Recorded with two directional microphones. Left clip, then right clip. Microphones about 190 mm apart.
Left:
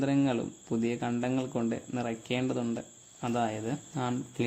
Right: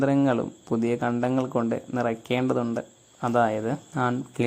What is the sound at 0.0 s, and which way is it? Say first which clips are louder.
Speech: right 6 dB; 15° right (ahead or behind).